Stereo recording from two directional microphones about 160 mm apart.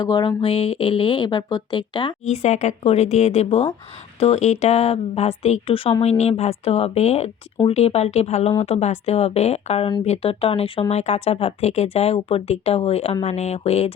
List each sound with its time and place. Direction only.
0.0 s speech: 25° left (ahead or behind)
2.4 s speech: 45° left (ahead or behind)